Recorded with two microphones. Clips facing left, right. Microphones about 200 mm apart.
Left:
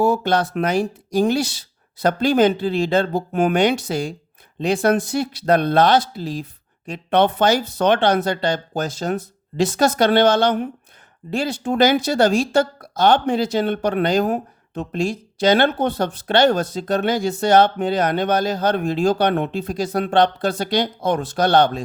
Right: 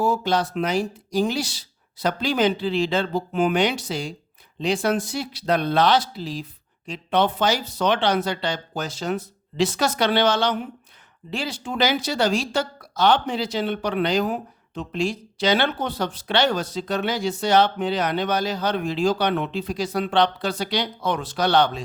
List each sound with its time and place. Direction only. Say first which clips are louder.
0.0 s a woman's voice: left 4 dB; 60° left (ahead or behind)